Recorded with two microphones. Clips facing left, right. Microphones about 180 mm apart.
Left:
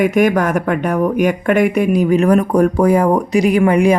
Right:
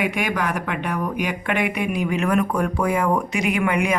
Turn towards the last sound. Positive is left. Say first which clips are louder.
# left 9 dB
turn(degrees=35)  # may be behind; listen again after turning